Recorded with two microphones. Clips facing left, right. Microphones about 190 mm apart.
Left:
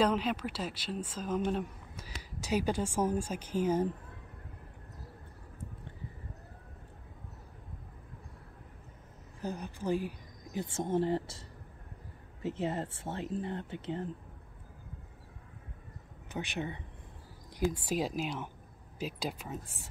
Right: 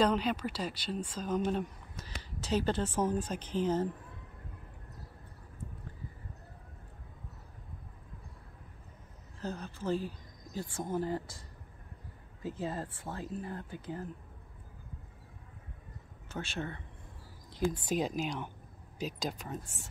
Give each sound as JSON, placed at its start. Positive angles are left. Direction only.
{"t": 0.0, "sound": "a woman's voice", "side_deg": 5}
{"t": 9.4, "sound": "speech", "side_deg": 15}
{"t": 12.4, "sound": "speech", "side_deg": 25}
{"t": 16.3, "sound": "speech", "side_deg": 15}
{"t": 17.6, "sound": "a woman's voice", "side_deg": 5}